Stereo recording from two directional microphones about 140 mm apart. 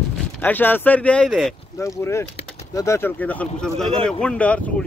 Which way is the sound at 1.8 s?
20° left (ahead or behind).